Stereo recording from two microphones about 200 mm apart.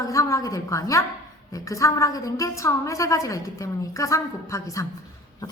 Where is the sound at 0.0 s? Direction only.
15° left (ahead or behind).